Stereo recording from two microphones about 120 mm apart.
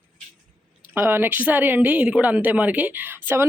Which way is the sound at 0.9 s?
20° right (ahead or behind).